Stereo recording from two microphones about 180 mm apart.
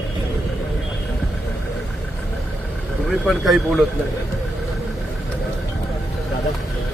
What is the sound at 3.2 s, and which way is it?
Speech, centre (ahead or behind).